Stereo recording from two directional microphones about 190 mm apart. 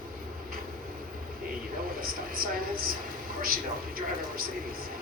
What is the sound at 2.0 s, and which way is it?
Speech, 50° right (ahead or behind).